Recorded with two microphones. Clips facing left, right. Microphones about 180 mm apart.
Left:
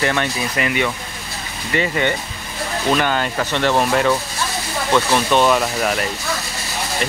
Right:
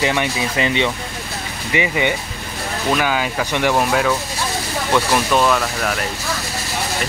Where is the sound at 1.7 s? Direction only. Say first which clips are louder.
Even; 15° right (ahead or behind); by 6.1 s 5° left (ahead or behind).